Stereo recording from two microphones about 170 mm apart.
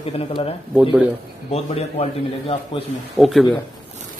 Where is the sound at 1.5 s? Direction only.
35° left (ahead or behind).